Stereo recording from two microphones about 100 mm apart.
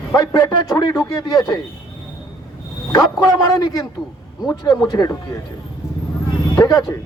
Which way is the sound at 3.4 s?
35° left (ahead or behind).